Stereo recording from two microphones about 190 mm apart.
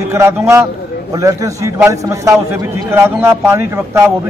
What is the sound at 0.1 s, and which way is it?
A man's voice, 15° right (ahead or behind).